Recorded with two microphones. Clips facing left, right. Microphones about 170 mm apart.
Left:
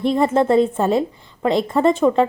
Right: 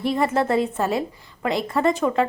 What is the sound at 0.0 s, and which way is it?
A woman's voice, 25° left (ahead or behind).